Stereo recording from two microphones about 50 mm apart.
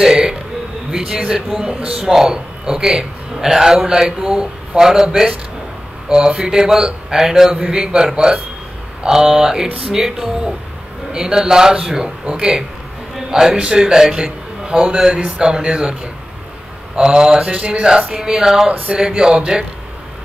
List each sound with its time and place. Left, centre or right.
0.0 s a man's voice: centre
16.9 s speech: centre
17.8 s a man's voice: centre